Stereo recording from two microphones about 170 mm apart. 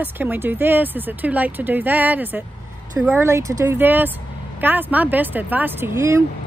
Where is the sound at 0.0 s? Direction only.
10° right (ahead or behind).